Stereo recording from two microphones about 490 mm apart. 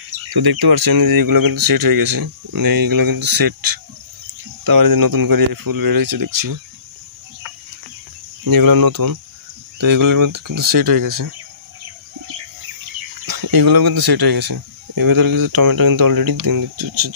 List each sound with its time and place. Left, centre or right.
0.3 s speech: right
8.5 s speech: right
13.2 s speech: right